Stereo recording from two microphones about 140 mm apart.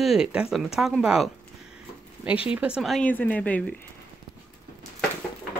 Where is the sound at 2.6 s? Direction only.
5° right (ahead or behind).